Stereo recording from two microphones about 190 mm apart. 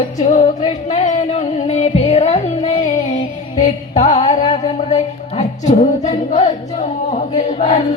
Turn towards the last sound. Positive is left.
turn(degrees=35)  # may be behind; listen again after turning